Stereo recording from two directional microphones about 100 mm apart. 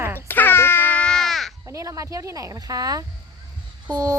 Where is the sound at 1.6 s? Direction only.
30° right (ahead or behind).